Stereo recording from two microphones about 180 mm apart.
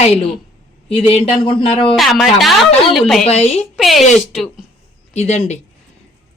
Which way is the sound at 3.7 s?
Centre (ahead or behind).